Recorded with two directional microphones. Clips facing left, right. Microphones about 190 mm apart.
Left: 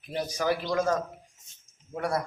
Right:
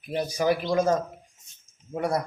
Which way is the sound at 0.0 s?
10° right (ahead or behind).